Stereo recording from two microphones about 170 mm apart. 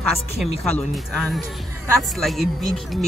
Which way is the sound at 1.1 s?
Centre (ahead or behind).